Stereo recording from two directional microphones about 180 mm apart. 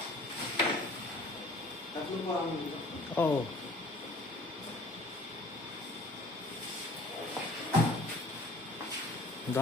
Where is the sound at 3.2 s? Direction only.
10° left (ahead or behind).